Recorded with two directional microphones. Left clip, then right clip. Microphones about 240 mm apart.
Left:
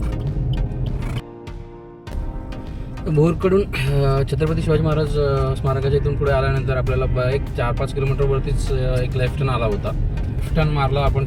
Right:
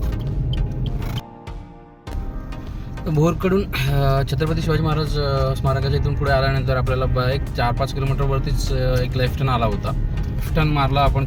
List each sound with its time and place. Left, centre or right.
3.2 s speech: centre